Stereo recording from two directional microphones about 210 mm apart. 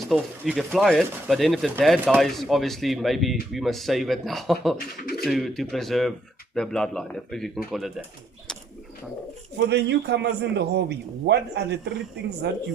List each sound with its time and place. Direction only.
0.0 s speech: centre (ahead or behind)
9.6 s a man's voice: 55° right (ahead or behind)